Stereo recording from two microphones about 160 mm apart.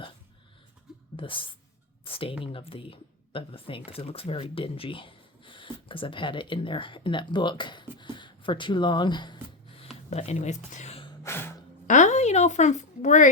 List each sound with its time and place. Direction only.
1.1 s speech: 35° left (ahead or behind)
10.1 s speech: 45° left (ahead or behind)
11.2 s gasp: 15° left (ahead or behind)
11.9 s a sound: 50° left (ahead or behind)